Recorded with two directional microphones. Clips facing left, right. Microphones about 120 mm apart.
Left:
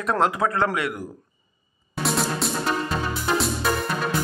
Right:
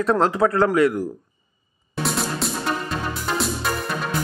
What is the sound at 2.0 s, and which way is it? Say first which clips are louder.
Music: left 1 dB; centre (ahead or behind).